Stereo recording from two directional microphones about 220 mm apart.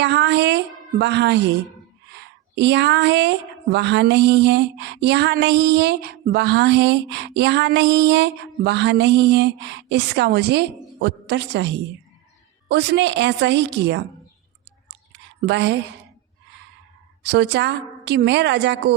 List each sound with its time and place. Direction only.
0.0 s speech: 50° right (ahead or behind)
15.4 s speech: 50° right (ahead or behind)
17.2 s speech: 50° right (ahead or behind)